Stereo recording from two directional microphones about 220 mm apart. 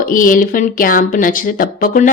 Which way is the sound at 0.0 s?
40° left (ahead or behind).